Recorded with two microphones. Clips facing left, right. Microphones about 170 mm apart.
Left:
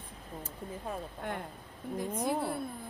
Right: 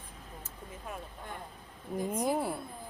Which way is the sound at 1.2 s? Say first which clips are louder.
Left 9 dB; 70° left (ahead or behind).